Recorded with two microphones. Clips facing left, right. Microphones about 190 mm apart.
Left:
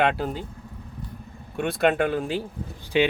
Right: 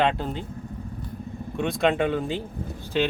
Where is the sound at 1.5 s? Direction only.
5° left (ahead or behind).